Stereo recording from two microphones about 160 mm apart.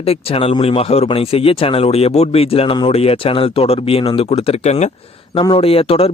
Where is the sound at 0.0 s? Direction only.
35° left (ahead or behind).